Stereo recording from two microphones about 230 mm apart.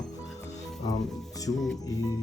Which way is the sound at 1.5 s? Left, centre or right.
Centre.